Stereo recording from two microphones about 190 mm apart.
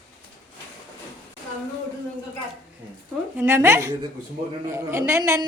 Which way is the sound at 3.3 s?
10° right (ahead or behind).